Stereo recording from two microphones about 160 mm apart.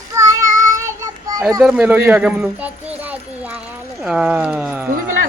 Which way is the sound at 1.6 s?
5° right (ahead or behind).